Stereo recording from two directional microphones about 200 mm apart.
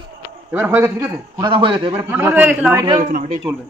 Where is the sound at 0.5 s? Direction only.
10° right (ahead or behind).